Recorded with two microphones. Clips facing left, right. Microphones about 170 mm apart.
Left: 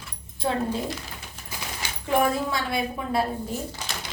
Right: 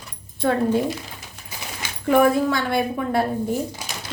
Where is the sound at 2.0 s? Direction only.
60° right (ahead or behind).